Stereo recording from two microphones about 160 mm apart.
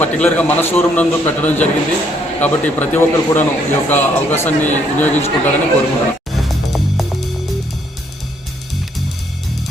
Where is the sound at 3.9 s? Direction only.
10° left (ahead or behind).